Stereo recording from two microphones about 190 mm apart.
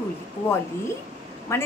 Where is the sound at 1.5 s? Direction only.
15° left (ahead or behind).